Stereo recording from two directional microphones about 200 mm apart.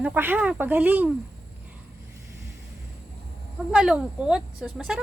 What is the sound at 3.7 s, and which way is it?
Speech, 5° right (ahead or behind).